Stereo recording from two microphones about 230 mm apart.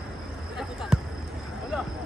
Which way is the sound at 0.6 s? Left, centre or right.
Centre.